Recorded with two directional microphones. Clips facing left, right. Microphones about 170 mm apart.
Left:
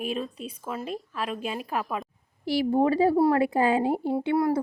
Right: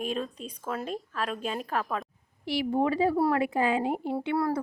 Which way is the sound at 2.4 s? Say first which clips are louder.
Left 4 dB; 35° left (ahead or behind).